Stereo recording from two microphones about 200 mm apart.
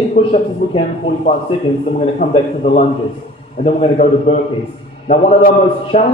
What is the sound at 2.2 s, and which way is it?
A man's voice, 35° left (ahead or behind).